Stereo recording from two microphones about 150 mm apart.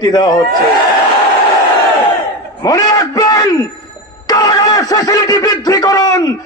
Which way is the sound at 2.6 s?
25° left (ahead or behind).